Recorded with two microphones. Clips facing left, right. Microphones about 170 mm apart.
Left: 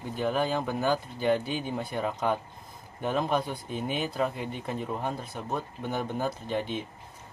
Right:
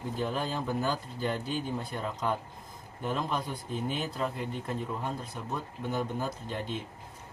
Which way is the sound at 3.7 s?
15° left (ahead or behind).